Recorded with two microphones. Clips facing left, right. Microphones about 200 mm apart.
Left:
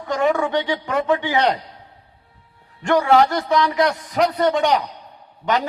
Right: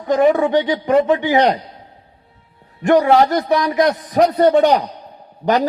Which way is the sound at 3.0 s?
35° right (ahead or behind).